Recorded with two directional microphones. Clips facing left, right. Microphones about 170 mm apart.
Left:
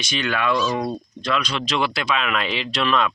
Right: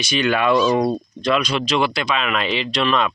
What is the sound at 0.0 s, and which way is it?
Speech, 15° right (ahead or behind).